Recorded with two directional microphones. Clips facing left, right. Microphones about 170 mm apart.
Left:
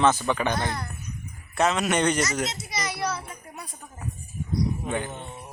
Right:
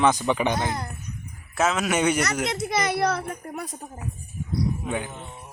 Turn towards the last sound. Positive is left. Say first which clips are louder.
# even
turn(degrees=-5)  # may be behind; listen again after turning